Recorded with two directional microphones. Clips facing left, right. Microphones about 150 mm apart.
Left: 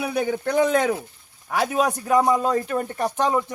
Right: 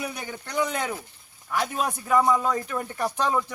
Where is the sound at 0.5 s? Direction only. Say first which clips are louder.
Left 7 dB; 60° left (ahead or behind); by 0.9 s 75° left (ahead or behind).